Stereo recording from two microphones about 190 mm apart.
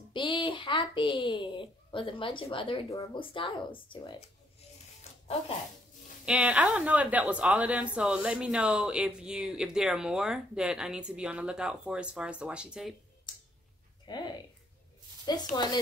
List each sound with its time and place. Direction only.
0.1 s a child's voice: 25° left (ahead or behind)
6.2 s a woman's voice: 5° right (ahead or behind)
14.0 s speech: 25° left (ahead or behind)
15.5 s a child's voice: 20° left (ahead or behind)